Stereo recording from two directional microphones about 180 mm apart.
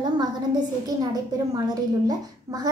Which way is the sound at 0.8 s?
20° right (ahead or behind).